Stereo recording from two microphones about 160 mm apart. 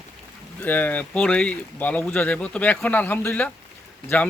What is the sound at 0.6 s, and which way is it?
Speech, 10° left (ahead or behind).